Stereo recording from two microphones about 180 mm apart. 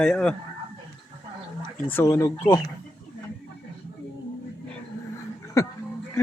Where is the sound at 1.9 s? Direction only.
15° left (ahead or behind).